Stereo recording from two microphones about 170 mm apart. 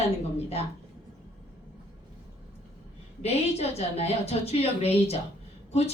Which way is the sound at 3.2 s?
35° left (ahead or behind).